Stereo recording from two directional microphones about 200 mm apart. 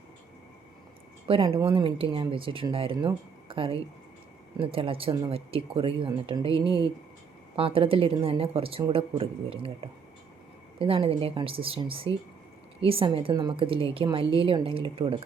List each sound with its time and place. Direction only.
1.3 s speech: 25° right (ahead or behind)